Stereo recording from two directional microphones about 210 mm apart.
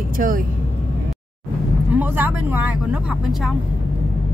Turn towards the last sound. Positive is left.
turn(degrees=-5)  # may be behind; listen again after turning